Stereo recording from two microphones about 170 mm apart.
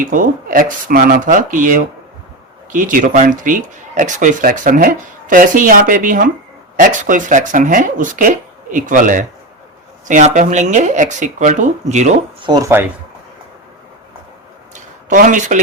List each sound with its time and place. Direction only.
0.0 s speech: 50° right (ahead or behind)
12.4 s speech: 25° right (ahead or behind)
14.8 s speech: 50° right (ahead or behind)